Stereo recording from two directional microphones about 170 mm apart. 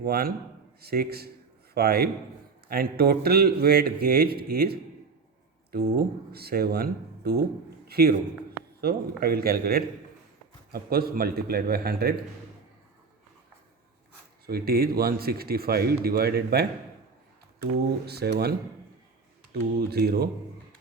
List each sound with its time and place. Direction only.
0.0 s a man's voice: 65° right (ahead or behind)
14.4 s speech: 65° right (ahead or behind)
19.9 s speech: 70° right (ahead or behind)